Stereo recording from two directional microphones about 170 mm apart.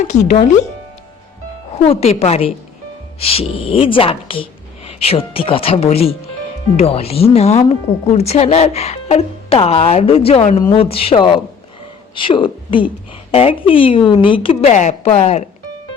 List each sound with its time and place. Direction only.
0.0 s speech: 45° left (ahead or behind)
1.8 s speech: 35° left (ahead or behind)
10.6 s a woman's voice: 30° left (ahead or behind)